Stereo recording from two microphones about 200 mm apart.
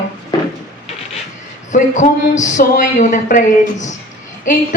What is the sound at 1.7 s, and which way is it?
A woman's voice, 35° left (ahead or behind).